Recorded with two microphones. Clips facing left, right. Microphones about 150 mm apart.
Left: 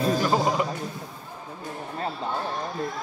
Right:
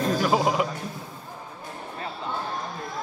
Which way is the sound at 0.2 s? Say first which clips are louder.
Right 1 dB; 5° right (ahead or behind).